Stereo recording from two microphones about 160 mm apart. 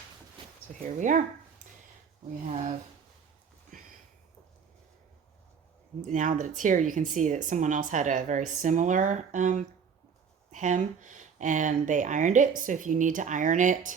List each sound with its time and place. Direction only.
0.8 s speech: 50° right (ahead or behind)
2.5 s speech: 45° right (ahead or behind)
6.1 s speech: 55° right (ahead or behind)